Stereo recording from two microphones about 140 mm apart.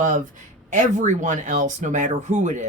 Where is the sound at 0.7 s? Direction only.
60° right (ahead or behind).